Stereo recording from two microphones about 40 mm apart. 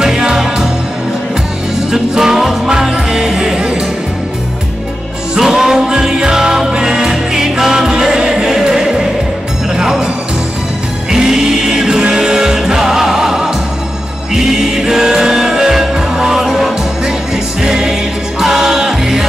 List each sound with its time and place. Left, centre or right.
0.0 s music: centre
1.9 s music: centre
5.4 s music: centre
11.1 s music: centre